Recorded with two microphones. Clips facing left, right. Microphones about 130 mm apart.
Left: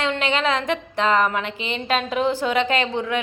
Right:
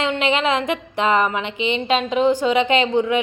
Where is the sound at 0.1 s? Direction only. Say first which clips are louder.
Right 2 dB; 5° right (ahead or behind).